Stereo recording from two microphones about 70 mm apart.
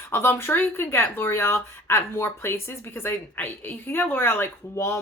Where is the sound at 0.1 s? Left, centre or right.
Left.